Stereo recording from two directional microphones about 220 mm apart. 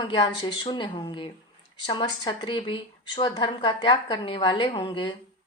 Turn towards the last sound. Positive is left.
turn(degrees=20)  # may be behind; listen again after turning